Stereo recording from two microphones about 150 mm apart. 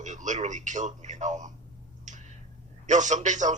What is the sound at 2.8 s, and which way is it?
Speech, 55° right (ahead or behind).